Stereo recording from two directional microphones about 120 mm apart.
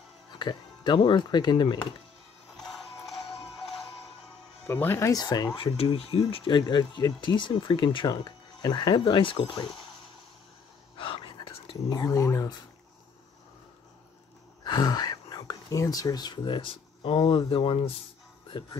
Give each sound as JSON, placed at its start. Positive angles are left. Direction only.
{"t": 0.3, "sound": "speech", "side_deg": 40}
{"t": 4.6, "sound": "speech", "side_deg": 20}
{"t": 5.8, "sound": "speech", "side_deg": 55}
{"t": 11.0, "sound": "whispering", "side_deg": 45}
{"t": 11.9, "sound": "speech", "side_deg": 30}
{"t": 14.6, "sound": "speech", "side_deg": 35}